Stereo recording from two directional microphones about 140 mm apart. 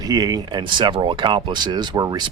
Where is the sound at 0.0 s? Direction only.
25° right (ahead or behind).